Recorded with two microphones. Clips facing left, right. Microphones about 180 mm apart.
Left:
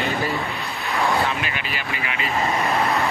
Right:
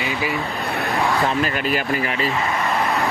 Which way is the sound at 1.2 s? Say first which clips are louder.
Right 6 dB; 40° right (ahead or behind).